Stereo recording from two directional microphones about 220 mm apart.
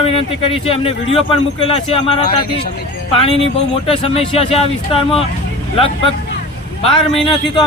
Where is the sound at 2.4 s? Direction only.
45° left (ahead or behind).